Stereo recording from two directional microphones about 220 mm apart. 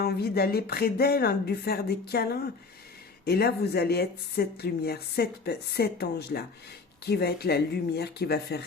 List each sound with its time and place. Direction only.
0.0 s speech: 45° left (ahead or behind)